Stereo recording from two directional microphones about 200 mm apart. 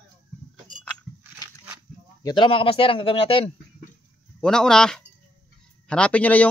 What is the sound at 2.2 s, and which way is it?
A man's voice, 20° left (ahead or behind).